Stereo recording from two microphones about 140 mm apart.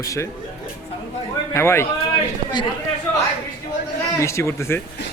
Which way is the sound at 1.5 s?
20° left (ahead or behind).